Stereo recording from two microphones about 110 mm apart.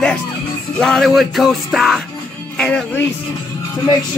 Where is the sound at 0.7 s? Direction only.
5° left (ahead or behind).